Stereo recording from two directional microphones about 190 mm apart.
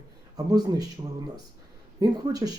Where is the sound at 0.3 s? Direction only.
20° right (ahead or behind).